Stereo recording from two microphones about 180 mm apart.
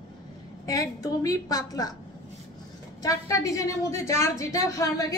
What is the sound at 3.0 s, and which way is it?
A woman's voice, 20° left (ahead or behind).